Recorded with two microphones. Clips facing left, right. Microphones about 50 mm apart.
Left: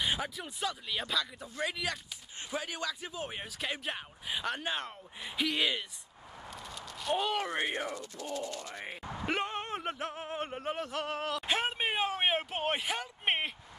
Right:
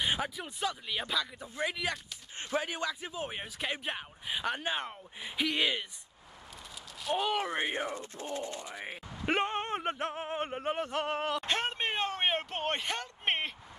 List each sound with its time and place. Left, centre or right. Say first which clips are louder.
0.0 s speech: right 1 dB; centre
2.5 s speech: right 3 dB; right; by 5.9 s centre
7.0 s speech: right 1 dB; centre
7.8 s speech: right 1 dB; right
8.6 s speech: right 1 dB; centre
9.2 s a sound: right 4 dB; right
9.9 s speech: right 3 dB; right
11.4 s a sound: left 1 dB; centre